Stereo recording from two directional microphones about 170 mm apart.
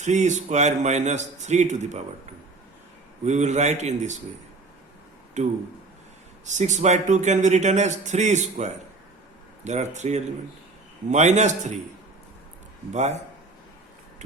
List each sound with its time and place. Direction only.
0.0 s speech: 45° right (ahead or behind)
3.2 s speech: 45° right (ahead or behind)
5.4 s speech: 45° right (ahead or behind)
12.9 s a man's voice: 40° right (ahead or behind)